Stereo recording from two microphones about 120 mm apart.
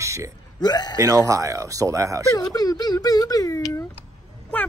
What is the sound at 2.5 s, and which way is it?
Speech, 35° left (ahead or behind).